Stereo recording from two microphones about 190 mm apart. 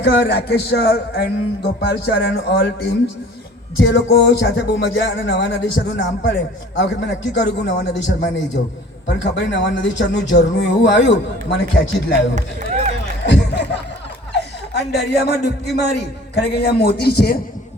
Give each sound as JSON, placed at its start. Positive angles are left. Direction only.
{"t": 0.0, "sound": "speech", "side_deg": 60}
{"t": 3.8, "sound": "speech", "side_deg": 60}
{"t": 12.3, "sound": "speech", "side_deg": -40}
{"t": 13.2, "sound": "speech", "side_deg": 65}